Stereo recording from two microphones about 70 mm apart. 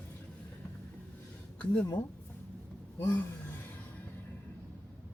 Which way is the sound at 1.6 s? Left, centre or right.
Left.